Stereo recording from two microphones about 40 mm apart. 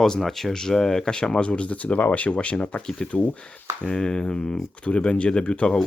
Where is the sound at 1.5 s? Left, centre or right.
Left.